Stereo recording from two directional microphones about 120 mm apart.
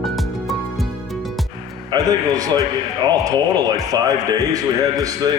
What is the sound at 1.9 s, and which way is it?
Speech, 30° right (ahead or behind).